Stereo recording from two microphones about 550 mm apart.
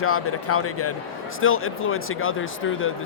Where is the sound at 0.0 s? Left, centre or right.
Left.